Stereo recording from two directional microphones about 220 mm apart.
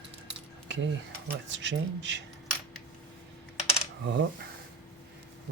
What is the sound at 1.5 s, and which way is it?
Speech, 55° right (ahead or behind).